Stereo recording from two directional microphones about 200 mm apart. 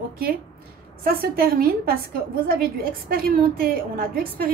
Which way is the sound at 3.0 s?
45° right (ahead or behind).